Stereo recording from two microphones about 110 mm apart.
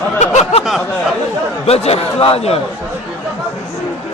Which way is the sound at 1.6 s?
70° left (ahead or behind).